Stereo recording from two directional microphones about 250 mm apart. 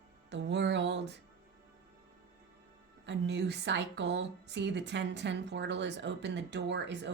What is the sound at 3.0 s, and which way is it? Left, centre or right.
A woman's voice, right.